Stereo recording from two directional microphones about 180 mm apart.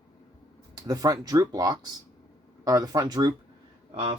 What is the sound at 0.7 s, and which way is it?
Speech, 20° right (ahead or behind).